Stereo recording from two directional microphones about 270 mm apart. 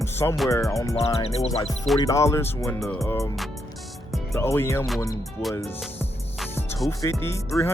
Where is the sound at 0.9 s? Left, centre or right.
Left.